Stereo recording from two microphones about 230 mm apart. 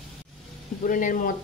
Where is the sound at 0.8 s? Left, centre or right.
Left.